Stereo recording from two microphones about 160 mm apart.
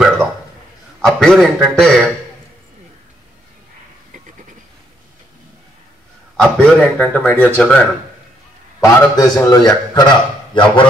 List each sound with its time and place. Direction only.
1.0 s a man's voice: centre (ahead or behind)
6.3 s speech: 5° left (ahead or behind)
8.8 s a man's voice: 20° left (ahead or behind)